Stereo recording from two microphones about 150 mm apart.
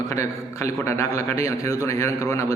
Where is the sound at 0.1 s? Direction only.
20° left (ahead or behind).